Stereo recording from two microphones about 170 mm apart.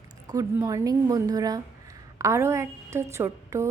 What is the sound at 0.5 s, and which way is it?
A woman's voice, 15° right (ahead or behind).